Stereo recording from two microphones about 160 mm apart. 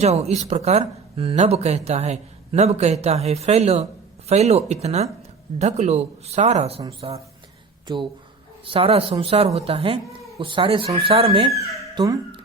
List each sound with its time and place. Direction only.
0.0 s speech: 40° right (ahead or behind)
8.6 s speech: 35° right (ahead or behind)